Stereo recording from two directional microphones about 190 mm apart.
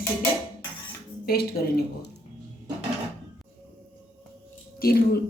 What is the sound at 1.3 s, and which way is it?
Speech, 55° left (ahead or behind).